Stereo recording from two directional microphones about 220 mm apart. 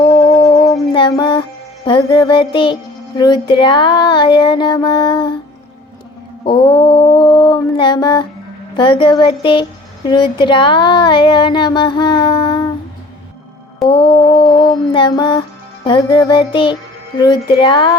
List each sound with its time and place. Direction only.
0.0 s music: 20° left (ahead or behind)
6.4 s a sound: 20° left (ahead or behind)
8.7 s music: 20° left (ahead or behind)
13.8 s music: 20° left (ahead or behind)